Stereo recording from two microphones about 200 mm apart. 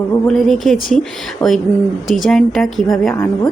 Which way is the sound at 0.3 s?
Centre (ahead or behind).